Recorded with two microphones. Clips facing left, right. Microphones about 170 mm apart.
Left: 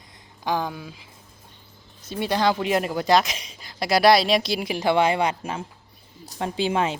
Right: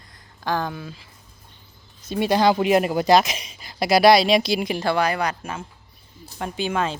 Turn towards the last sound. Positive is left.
turn(degrees=20)  # may be behind; listen again after turning